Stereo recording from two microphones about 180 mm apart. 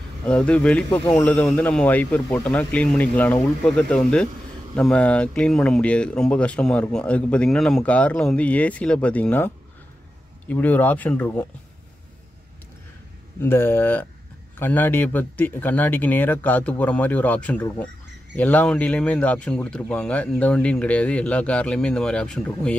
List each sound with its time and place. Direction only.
0.2 s speech: 5° left (ahead or behind)
10.5 s speech: 10° left (ahead or behind)
13.4 s speech: 10° left (ahead or behind)